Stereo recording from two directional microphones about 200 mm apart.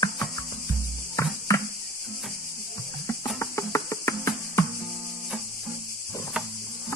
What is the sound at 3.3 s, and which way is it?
Music, 15° left (ahead or behind).